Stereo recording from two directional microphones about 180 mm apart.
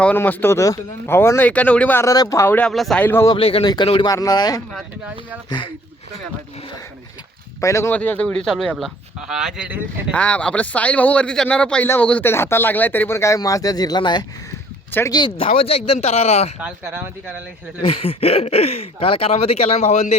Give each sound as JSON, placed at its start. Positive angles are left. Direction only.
{"t": 0.0, "sound": "speech", "side_deg": 10}
{"t": 3.3, "sound": "speech", "side_deg": 30}
{"t": 7.6, "sound": "speech", "side_deg": 15}
{"t": 10.1, "sound": "speech", "side_deg": 5}
{"t": 16.6, "sound": "speech", "side_deg": -10}
{"t": 17.8, "sound": "speech", "side_deg": 35}